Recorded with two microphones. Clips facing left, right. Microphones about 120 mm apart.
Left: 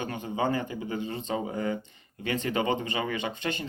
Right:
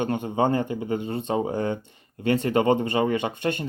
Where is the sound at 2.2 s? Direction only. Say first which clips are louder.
Right 7 dB; 55° right (ahead or behind).